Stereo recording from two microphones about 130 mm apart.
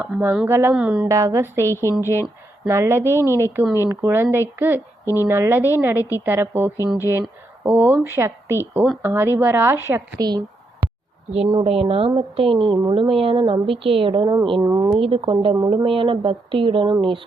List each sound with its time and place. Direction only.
0.1 s speech: centre (ahead or behind)
0.4 s speech: 15° right (ahead or behind)
1.0 s speech: 25° right (ahead or behind)
6.7 s speech: 25° left (ahead or behind)
7.6 s speech: 15° right (ahead or behind)
10.2 s speech: 35° right (ahead or behind)
11.9 s a woman's voice: 45° right (ahead or behind); by 14.8 s 25° right (ahead or behind)
14.8 s a woman's voice: 45° right (ahead or behind)